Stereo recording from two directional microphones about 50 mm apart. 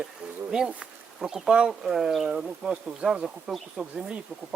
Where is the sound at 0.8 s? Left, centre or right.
Centre.